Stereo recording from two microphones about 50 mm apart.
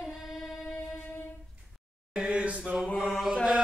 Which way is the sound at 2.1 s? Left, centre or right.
Right.